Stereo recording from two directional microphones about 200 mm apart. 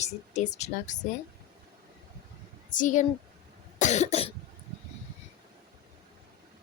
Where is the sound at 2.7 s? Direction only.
40° left (ahead or behind).